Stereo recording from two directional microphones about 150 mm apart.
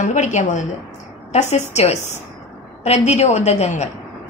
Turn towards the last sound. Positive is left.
turn(degrees=50)  # may be behind; listen again after turning